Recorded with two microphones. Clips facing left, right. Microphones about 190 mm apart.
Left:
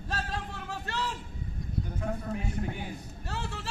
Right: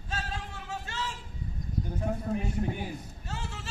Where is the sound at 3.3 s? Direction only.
60° left (ahead or behind).